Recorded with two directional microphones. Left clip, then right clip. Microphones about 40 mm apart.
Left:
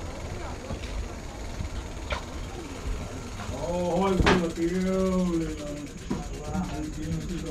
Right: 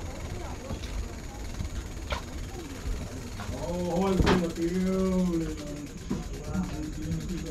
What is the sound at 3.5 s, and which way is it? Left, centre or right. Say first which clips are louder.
Mechanisms: left 4 dB; right.